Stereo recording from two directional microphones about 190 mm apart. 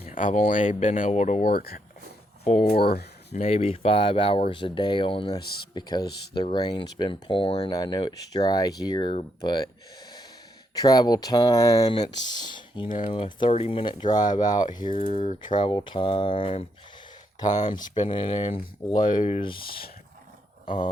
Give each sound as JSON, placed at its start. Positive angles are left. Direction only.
{"t": 0.0, "sound": "speech", "side_deg": 45}
{"t": 2.4, "sound": "speech", "side_deg": 40}
{"t": 2.7, "sound": "speech", "side_deg": 55}
{"t": 3.3, "sound": "speech", "side_deg": 30}
{"t": 17.7, "sound": "speech", "side_deg": 20}
{"t": 20.7, "sound": "speech", "side_deg": 40}